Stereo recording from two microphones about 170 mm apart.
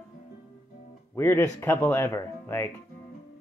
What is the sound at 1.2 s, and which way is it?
Speech, 15° left (ahead or behind).